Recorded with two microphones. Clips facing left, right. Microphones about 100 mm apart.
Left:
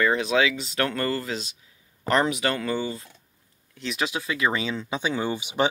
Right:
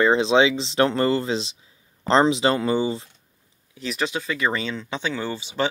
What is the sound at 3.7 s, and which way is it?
Speech, centre (ahead or behind).